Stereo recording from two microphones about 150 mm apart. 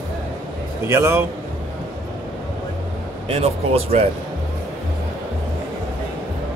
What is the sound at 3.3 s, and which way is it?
Speech, 40° right (ahead or behind).